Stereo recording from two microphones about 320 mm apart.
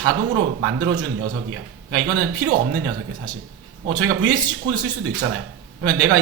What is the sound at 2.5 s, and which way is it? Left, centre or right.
Speech, right.